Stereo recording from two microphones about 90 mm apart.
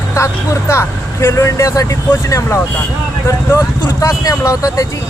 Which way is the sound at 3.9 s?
40° left (ahead or behind).